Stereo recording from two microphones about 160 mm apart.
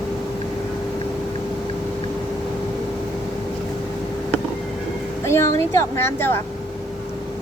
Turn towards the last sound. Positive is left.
turn(degrees=15)  # may be behind; listen again after turning